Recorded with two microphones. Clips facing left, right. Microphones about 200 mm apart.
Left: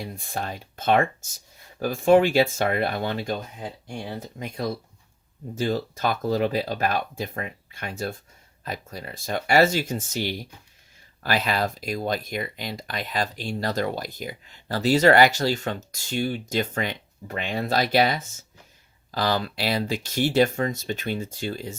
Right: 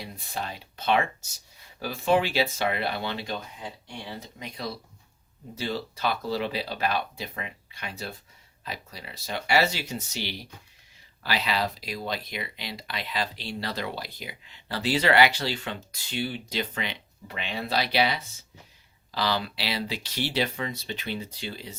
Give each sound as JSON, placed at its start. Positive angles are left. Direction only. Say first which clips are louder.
{"t": 0.0, "sound": "speech", "louder": "left 4 dB", "side_deg": 50}